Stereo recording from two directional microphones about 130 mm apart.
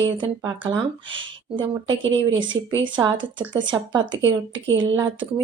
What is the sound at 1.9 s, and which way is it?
Speech, 40° right (ahead or behind).